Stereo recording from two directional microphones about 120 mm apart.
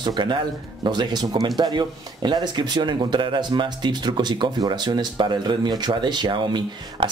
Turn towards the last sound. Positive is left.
turn(degrees=-40)  # may be behind; listen again after turning